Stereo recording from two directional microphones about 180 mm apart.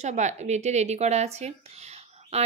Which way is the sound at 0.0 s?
40° right (ahead or behind).